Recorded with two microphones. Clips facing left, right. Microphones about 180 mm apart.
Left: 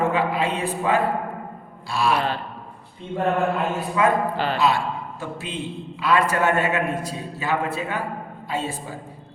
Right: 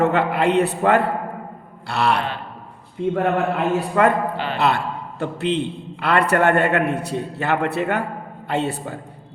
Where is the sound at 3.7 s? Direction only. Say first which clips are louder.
Right 5 dB; 65° right (ahead or behind).